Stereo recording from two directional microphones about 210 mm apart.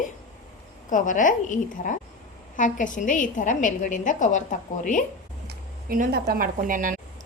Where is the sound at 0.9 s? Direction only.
40° left (ahead or behind).